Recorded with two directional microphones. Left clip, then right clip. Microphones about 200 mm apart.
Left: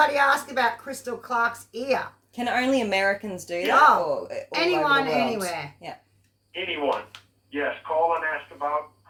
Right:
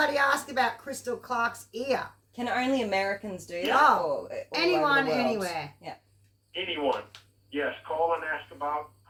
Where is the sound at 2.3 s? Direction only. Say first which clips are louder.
Left 4 dB; 50° left (ahead or behind).